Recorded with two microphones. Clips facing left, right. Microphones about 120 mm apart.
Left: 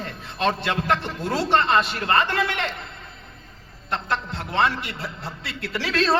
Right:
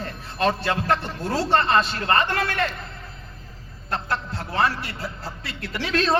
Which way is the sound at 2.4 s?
20° left (ahead or behind).